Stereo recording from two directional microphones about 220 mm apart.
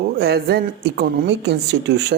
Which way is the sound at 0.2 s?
45° right (ahead or behind).